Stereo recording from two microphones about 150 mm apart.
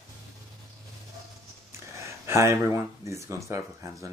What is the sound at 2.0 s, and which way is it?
Speech, 20° right (ahead or behind).